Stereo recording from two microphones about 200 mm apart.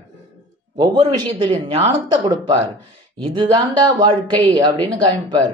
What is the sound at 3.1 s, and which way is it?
Speech, 25° right (ahead or behind).